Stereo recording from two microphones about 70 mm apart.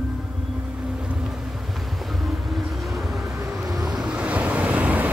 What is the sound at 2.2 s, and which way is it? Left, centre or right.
Vehicle, centre.